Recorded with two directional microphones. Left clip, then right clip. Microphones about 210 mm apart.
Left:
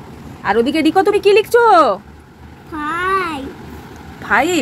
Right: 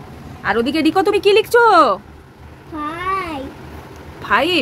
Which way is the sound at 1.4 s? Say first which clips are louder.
Left 1 dB; 75° right (ahead or behind).